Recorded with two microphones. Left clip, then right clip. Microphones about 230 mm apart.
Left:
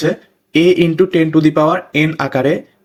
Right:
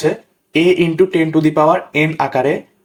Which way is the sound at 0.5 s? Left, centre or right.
Left.